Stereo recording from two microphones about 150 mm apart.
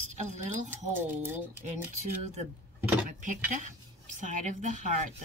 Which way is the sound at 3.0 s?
60° right (ahead or behind).